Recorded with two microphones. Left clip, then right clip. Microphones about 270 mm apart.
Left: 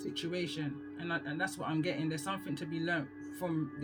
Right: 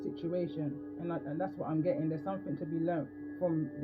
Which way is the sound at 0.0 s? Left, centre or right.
Left.